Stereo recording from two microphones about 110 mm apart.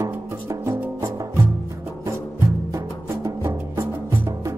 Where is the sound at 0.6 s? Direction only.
25° right (ahead or behind).